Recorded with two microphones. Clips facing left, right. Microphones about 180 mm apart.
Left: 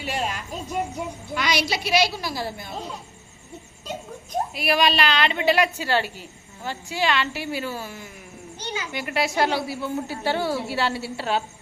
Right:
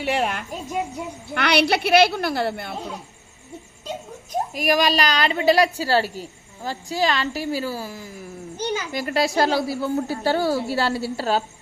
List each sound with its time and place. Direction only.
0.0 s speech: 60° right (ahead or behind)
4.5 s a woman's voice: 40° right (ahead or behind)